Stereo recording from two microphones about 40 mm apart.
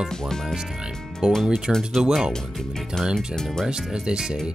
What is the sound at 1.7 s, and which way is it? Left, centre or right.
Speech, centre.